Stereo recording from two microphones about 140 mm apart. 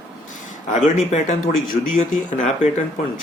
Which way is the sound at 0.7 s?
60° left (ahead or behind).